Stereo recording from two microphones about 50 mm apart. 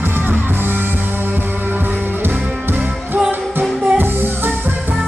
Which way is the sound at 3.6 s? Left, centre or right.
Right.